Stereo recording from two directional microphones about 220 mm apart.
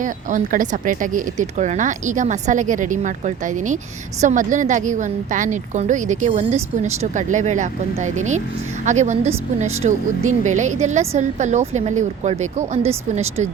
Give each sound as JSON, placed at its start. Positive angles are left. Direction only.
{"t": 0.0, "sound": "speech", "side_deg": -35}